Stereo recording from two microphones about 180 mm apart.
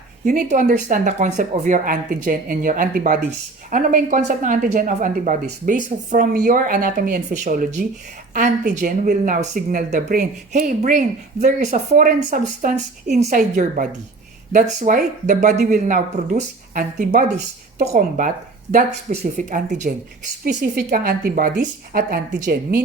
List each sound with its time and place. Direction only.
0.3 s speech: 45° right (ahead or behind)
20.6 s speech: 55° right (ahead or behind)